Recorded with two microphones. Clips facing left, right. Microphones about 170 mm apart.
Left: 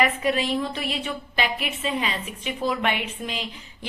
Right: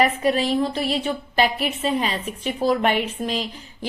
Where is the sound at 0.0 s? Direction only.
35° right (ahead or behind).